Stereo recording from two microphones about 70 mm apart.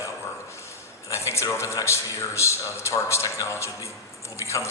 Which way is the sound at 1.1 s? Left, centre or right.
Left.